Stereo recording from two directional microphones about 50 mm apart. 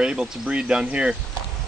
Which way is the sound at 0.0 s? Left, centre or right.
Right.